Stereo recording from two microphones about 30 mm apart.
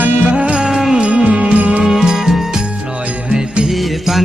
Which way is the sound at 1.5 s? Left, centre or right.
Right.